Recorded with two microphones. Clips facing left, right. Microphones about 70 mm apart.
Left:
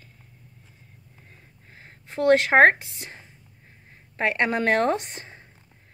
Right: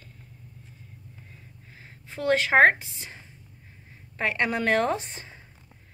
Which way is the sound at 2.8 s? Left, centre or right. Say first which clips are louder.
Left 2 dB; left.